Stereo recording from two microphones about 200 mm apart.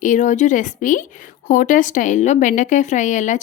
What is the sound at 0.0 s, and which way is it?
Speech, 40° left (ahead or behind).